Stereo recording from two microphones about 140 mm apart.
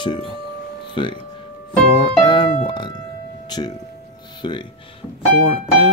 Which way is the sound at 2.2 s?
35° left (ahead or behind).